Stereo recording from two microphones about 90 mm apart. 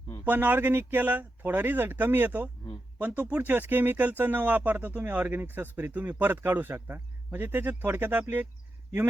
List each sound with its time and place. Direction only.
0.3 s speech: 20° right (ahead or behind)